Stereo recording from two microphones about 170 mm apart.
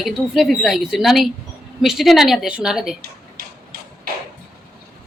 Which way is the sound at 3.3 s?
60° right (ahead or behind).